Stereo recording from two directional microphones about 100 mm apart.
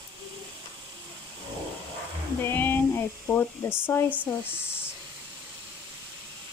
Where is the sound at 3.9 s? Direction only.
25° left (ahead or behind).